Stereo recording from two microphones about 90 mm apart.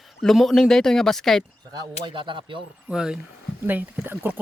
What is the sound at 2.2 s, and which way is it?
Speech, 70° right (ahead or behind).